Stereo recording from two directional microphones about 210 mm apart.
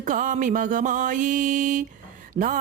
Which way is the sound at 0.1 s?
40° right (ahead or behind).